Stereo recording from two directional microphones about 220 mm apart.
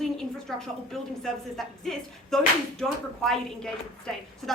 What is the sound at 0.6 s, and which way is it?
A woman's voice, centre (ahead or behind).